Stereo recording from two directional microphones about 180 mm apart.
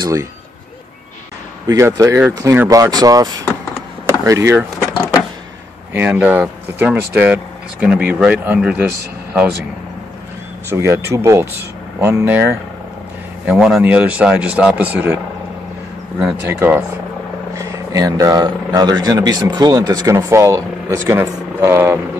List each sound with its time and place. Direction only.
0.0 s speech: 15° right (ahead or behind)
1.7 s speech: 15° right (ahead or behind)
4.0 s power windows: 15° right (ahead or behind)
5.9 s speech: 10° right (ahead or behind)
10.7 s speech: 15° right (ahead or behind)
13.5 s speech: 5° right (ahead or behind)
16.2 s speech: 5° right (ahead or behind)